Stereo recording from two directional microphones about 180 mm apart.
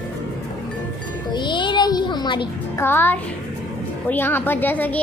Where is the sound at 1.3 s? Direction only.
25° left (ahead or behind).